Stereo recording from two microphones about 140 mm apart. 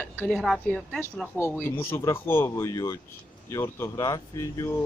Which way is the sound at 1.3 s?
15° left (ahead or behind).